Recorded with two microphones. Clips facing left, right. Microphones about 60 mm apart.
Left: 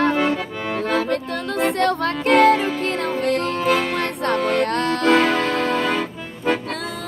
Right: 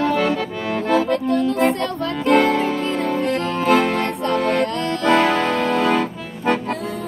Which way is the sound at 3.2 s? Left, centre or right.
Left.